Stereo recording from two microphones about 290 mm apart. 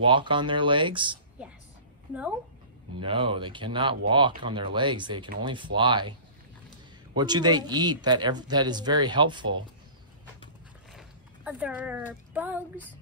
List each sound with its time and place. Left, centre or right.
0.0 s speech: centre
3.0 s speech: centre
7.2 s speech: centre
10.9 s speech: centre